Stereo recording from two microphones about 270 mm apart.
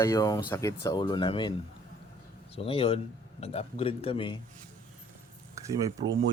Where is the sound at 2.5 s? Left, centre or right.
Left.